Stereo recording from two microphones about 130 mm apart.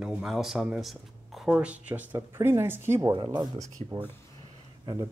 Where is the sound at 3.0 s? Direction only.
35° right (ahead or behind).